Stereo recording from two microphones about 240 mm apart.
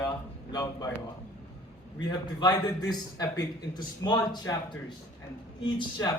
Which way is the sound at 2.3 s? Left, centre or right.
Centre.